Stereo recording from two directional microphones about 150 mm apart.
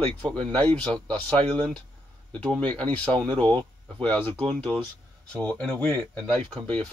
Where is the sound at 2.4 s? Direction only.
10° left (ahead or behind).